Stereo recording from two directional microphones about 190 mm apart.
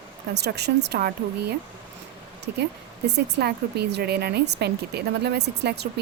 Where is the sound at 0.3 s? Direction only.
60° right (ahead or behind).